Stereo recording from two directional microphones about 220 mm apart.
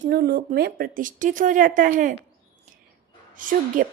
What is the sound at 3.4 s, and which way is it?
Speech, 35° right (ahead or behind).